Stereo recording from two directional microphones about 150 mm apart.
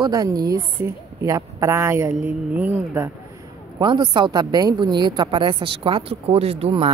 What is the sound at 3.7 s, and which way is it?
A woman's voice, 30° right (ahead or behind).